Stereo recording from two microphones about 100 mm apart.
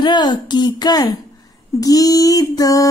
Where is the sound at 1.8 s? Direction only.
40° left (ahead or behind).